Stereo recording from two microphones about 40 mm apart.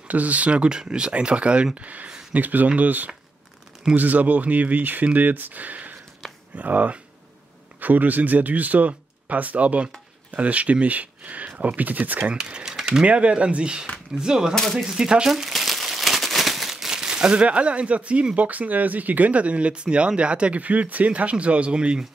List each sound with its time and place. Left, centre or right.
0.1 s speech: right
1.8 s speech: right
12.4 s speech: centre
13.0 s speech: right
14.5 s speech: centre
14.8 s speech: centre
15.2 s crumpling: centre; by 18.2 s right
18.3 s speech: right